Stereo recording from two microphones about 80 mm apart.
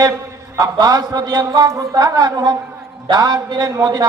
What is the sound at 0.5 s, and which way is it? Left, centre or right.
A man's voice, right.